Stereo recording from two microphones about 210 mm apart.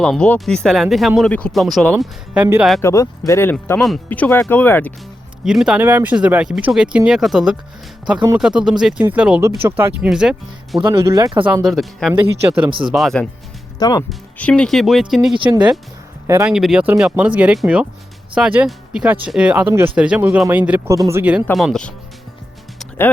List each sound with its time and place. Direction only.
0.0 s speech: 5° left (ahead or behind)
2.8 s speech: 15° left (ahead or behind)
5.5 s speech: 5° right (ahead or behind)
10.8 s speech: 15° right (ahead or behind)
11.4 s speech: 5° right (ahead or behind)
13.7 s speech: 20° left (ahead or behind)
14.1 s speech: 5° left (ahead or behind)
16.2 s speech: 15° right (ahead or behind)
21.4 s speech: centre (ahead or behind)